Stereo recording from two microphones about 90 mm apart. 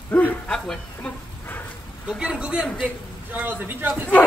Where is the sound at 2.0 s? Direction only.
10° right (ahead or behind).